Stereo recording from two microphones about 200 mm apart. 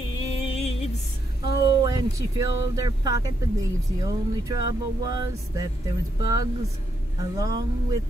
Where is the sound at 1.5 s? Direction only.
50° left (ahead or behind).